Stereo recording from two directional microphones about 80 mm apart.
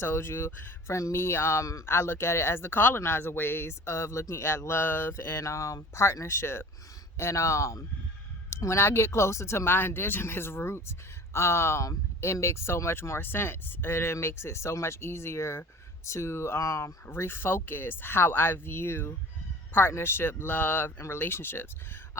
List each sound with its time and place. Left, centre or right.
0.0 s speech: left